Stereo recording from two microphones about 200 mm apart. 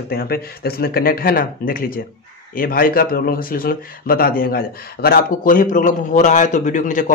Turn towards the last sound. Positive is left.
turn(degrees=40)  # may be behind; listen again after turning